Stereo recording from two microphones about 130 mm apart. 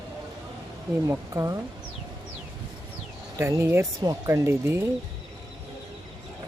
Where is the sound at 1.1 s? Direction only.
25° right (ahead or behind).